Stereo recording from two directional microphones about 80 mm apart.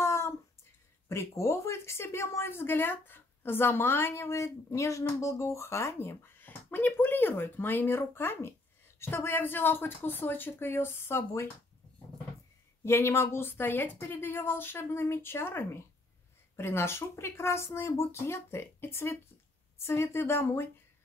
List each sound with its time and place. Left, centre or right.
0.0 s a sound: left
1.0 s a woman's voice: left
12.8 s a woman's voice: left